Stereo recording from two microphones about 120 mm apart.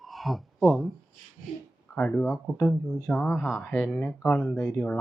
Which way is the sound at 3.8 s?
10° left (ahead or behind).